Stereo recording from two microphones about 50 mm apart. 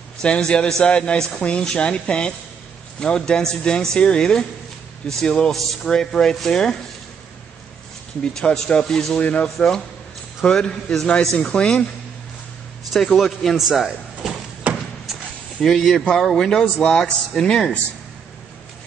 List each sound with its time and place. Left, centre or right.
0.2 s speech: centre
8.2 s speech: centre
9.2 s speech: left
12.9 s a man's voice: centre
14.7 s a sound: right
15.6 s a man's voice: centre